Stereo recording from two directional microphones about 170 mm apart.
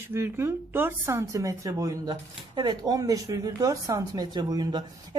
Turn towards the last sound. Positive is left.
turn(degrees=-25)  # may be behind; listen again after turning